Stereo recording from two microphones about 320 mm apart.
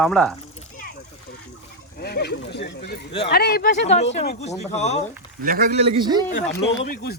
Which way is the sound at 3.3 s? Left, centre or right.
Left.